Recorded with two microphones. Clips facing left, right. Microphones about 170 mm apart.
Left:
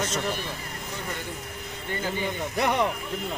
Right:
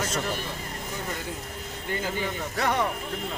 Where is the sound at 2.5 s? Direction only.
15° left (ahead or behind).